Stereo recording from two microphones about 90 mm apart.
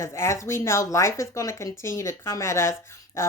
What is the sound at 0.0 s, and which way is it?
Speech, 35° left (ahead or behind).